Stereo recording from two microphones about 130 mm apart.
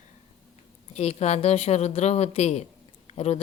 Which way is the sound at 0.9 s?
55° left (ahead or behind).